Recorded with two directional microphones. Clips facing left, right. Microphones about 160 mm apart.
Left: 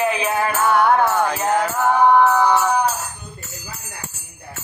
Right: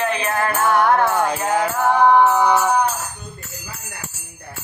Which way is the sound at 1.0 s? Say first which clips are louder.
Even; 10° right (ahead or behind).